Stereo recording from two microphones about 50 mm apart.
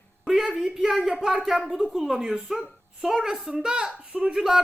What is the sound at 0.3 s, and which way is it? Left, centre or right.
A child's voice, centre.